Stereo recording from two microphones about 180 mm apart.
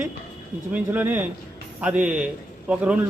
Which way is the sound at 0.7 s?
10° right (ahead or behind).